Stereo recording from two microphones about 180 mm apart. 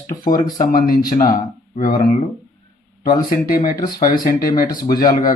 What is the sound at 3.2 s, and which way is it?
A man's voice, 50° left (ahead or behind).